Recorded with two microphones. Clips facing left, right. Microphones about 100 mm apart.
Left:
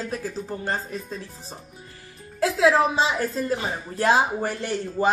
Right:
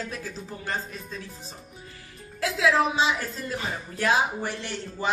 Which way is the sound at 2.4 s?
35° left (ahead or behind).